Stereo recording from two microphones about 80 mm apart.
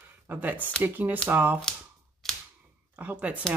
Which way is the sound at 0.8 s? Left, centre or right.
Right.